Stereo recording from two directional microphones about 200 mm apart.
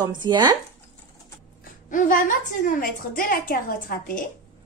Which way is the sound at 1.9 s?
40° left (ahead or behind).